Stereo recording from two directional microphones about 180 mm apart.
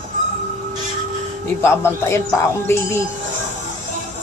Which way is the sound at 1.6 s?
15° left (ahead or behind).